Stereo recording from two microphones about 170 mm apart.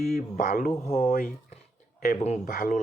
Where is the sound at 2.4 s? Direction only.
60° left (ahead or behind).